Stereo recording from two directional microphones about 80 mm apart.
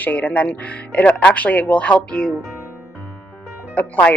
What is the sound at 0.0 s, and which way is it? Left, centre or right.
Speech, left.